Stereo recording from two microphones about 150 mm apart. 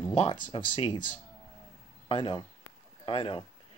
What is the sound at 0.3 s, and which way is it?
Speech, 35° left (ahead or behind).